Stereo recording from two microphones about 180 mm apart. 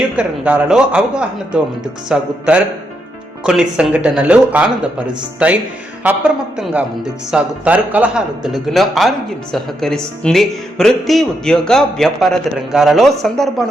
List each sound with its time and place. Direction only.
0.2 s speech: 5° right (ahead or behind)
3.4 s speech: 5° right (ahead or behind)